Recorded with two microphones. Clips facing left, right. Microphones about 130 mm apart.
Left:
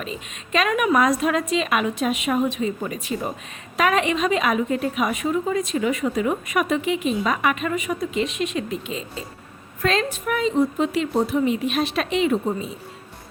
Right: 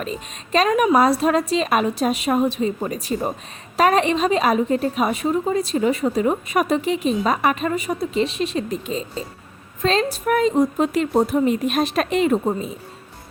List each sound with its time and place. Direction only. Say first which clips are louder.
0.0 s a woman's voice: right 3 dB; 40° right (ahead or behind)